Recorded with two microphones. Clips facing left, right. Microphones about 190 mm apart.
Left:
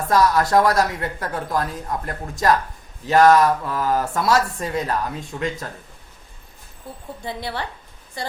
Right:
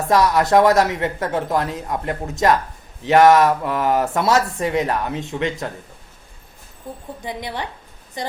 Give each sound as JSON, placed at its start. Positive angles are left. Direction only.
{"t": 0.1, "sound": "speech", "side_deg": -20}
{"t": 6.8, "sound": "a woman's voice", "side_deg": -15}